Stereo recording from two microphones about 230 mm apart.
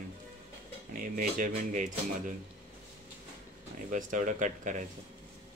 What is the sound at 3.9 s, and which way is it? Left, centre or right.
Speech, right.